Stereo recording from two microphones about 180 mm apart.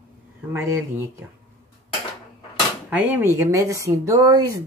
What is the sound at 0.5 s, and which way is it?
Speech, 15° right (ahead or behind).